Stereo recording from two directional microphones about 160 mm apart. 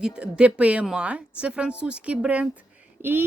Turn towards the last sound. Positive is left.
turn(degrees=-15)  # may be behind; listen again after turning